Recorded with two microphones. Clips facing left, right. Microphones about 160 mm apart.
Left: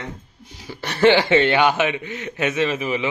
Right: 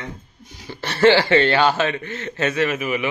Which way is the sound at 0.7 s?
15° left (ahead or behind).